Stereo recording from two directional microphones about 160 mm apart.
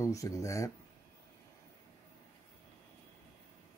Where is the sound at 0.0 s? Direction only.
20° left (ahead or behind).